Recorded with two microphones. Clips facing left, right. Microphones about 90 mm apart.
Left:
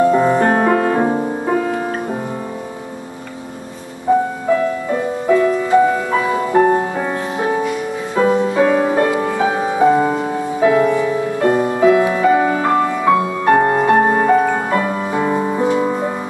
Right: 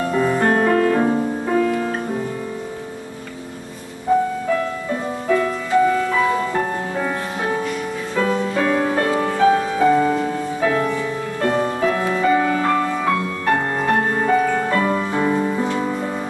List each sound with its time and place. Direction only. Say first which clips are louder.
0.0 s music: left 6 dB; 20° left (ahead or behind)
5.3 s music: left 5 dB; 20° left (ahead or behind)
15.8 s music: left 5 dB; 40° left (ahead or behind)